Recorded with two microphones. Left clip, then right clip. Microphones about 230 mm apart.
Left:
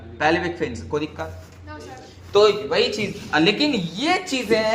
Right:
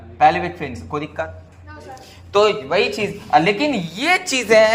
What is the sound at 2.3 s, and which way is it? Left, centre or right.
A woman's voice, right.